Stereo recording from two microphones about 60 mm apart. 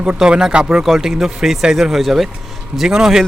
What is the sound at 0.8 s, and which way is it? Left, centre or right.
Speech, centre.